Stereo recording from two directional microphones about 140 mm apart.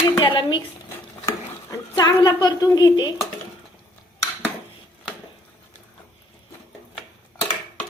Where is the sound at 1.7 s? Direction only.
20° left (ahead or behind).